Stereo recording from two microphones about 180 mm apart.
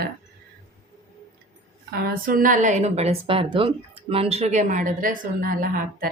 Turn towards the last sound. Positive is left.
turn(degrees=-55)  # may be behind; listen again after turning